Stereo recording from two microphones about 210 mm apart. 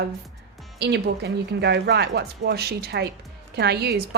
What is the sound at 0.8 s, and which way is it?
A woman's voice, 55° right (ahead or behind).